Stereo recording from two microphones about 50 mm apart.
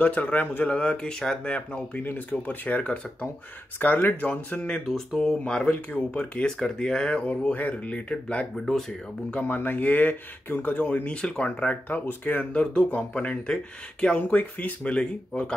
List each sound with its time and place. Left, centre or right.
0.0 s speech: left
3.8 s speech: left
4.8 s speech: centre
5.4 s speech: centre
7.5 s speech: left
8.5 s speech: centre
9.4 s speech: left
12.5 s speech: left
14.2 s speech: left
14.9 s speech: centre